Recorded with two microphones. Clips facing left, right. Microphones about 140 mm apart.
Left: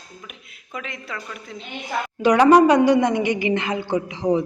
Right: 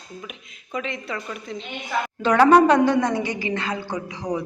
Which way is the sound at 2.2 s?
15° left (ahead or behind).